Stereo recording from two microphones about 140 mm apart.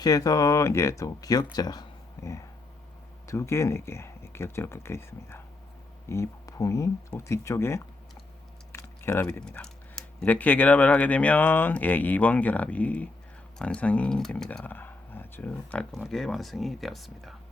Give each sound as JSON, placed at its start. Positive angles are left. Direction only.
{"t": 0.0, "sound": "speech", "side_deg": 25}
{"t": 8.7, "sound": "typing", "side_deg": 20}
{"t": 9.4, "sound": "speech", "side_deg": 5}